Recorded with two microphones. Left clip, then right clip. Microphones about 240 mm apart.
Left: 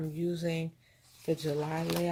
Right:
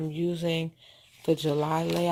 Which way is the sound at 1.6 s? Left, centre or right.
Right.